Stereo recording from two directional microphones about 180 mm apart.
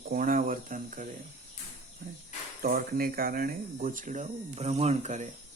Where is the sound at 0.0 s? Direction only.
55° right (ahead or behind).